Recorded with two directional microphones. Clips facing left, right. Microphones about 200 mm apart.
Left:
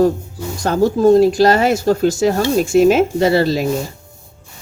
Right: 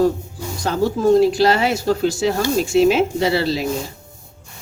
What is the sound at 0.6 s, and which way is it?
Speech, 45° left (ahead or behind).